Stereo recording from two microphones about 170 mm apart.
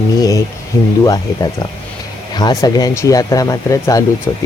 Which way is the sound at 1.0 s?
20° left (ahead or behind).